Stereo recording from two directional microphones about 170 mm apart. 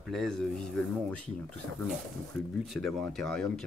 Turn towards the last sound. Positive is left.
turn(degrees=5)  # may be behind; listen again after turning